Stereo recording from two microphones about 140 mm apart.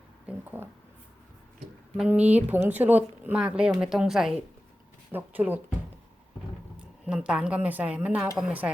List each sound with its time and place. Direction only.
0.3 s a sound: 15° right (ahead or behind)
2.0 s speech: 10° right (ahead or behind)
6.7 s a woman's voice: 5° right (ahead or behind)